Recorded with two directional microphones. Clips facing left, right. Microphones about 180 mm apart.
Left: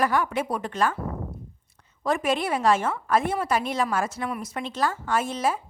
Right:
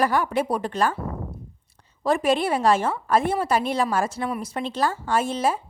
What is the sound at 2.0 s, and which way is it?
A woman's voice, 30° right (ahead or behind).